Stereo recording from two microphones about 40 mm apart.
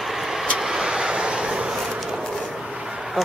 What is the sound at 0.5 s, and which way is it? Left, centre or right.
Vehicle, centre.